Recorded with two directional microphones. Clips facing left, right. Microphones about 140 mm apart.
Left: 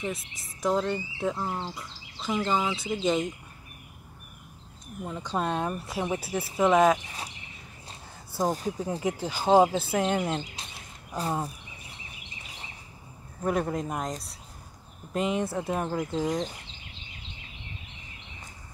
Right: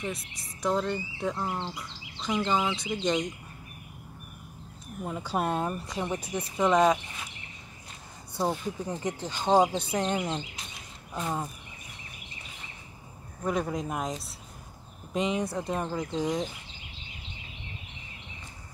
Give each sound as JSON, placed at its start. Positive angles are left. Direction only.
{"t": 0.0, "sound": "speech", "side_deg": 0}
{"t": 5.0, "sound": "speech", "side_deg": -10}
{"t": 5.7, "sound": "speech", "side_deg": 5}
{"t": 8.5, "sound": "speech", "side_deg": 40}
{"t": 8.8, "sound": "speech", "side_deg": 10}
{"t": 13.4, "sound": "speech", "side_deg": 5}